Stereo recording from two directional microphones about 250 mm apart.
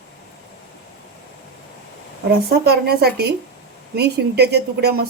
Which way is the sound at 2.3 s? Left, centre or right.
Right.